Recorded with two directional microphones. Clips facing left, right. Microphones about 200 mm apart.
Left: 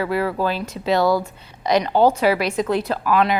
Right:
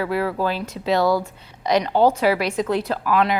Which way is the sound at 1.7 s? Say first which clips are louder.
Left 1 dB; 10° left (ahead or behind).